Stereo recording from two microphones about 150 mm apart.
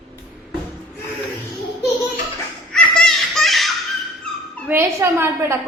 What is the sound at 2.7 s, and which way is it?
Belly laugh, 5° left (ahead or behind).